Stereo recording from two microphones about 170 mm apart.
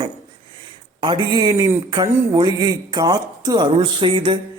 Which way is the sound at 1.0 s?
25° right (ahead or behind).